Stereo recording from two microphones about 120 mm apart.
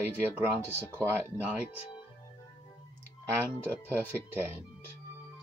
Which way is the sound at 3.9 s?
20° right (ahead or behind).